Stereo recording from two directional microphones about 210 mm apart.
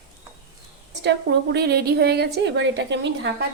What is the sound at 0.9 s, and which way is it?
A woman's voice, 55° right (ahead or behind).